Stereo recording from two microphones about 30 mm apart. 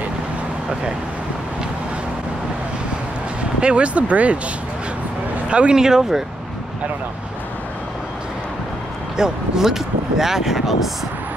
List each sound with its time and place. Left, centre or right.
3.6 s speech: right
5.5 s speech: right
5.8 s speech: centre
9.1 s speech: centre